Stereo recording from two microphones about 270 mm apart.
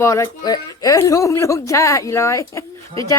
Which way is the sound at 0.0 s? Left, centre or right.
Centre.